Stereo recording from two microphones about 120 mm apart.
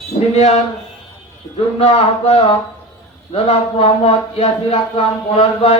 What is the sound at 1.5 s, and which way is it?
Speech, 55° left (ahead or behind).